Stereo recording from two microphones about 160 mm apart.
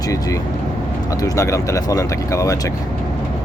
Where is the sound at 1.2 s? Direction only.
20° left (ahead or behind).